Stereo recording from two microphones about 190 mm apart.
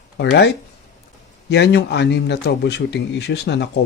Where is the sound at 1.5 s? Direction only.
60° left (ahead or behind).